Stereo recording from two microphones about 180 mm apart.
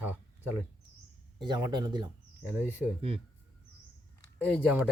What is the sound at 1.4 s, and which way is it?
Speech, 25° right (ahead or behind).